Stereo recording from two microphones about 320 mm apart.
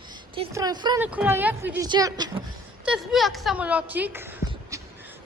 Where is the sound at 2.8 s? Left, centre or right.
Centre.